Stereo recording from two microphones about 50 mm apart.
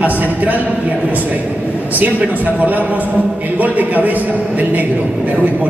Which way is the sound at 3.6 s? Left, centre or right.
Right.